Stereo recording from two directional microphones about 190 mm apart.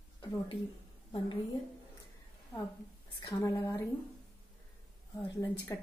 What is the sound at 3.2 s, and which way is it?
Speech, 15° left (ahead or behind).